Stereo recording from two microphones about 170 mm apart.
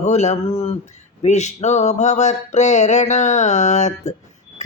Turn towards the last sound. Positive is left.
turn(degrees=45)  # may be behind; listen again after turning